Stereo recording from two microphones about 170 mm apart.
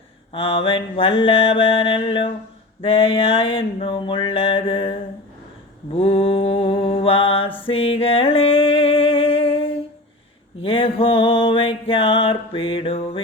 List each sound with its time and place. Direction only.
0.3 s music: 35° left (ahead or behind)
6.0 s mantra: 35° left (ahead or behind)
7.6 s music: 35° left (ahead or behind)